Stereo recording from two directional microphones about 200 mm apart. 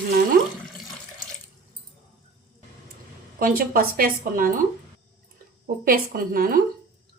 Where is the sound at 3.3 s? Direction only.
45° right (ahead or behind).